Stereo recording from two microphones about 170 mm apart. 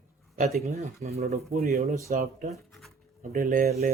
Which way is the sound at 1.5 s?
65° right (ahead or behind).